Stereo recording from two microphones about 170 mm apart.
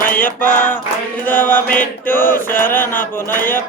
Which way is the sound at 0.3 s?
10° left (ahead or behind).